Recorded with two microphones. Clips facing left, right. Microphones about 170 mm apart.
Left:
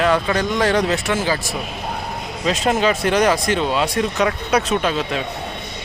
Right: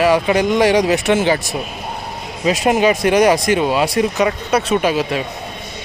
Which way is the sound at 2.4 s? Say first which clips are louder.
Right 4 dB; 10° right (ahead or behind).